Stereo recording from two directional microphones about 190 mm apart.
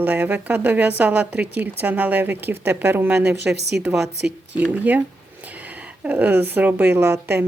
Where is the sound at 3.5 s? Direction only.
60° right (ahead or behind).